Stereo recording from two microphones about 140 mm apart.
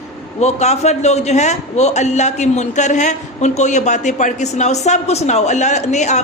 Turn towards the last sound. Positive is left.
turn(degrees=55)  # may be behind; listen again after turning